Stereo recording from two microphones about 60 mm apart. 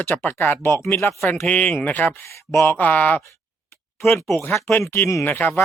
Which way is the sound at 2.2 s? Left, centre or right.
Left.